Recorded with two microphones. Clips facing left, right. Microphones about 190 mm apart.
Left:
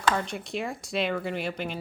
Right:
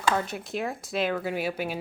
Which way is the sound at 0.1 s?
5° right (ahead or behind).